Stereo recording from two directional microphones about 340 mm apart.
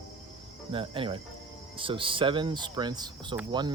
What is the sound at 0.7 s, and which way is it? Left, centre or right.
Speech, centre.